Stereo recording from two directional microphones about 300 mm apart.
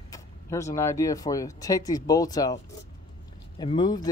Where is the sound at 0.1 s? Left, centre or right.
Centre.